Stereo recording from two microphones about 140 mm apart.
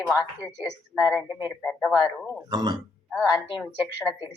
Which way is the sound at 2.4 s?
30° right (ahead or behind).